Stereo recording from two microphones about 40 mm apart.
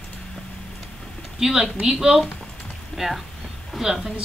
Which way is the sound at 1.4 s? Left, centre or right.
Centre.